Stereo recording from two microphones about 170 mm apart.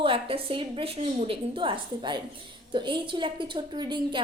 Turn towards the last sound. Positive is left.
turn(degrees=-25)  # may be behind; listen again after turning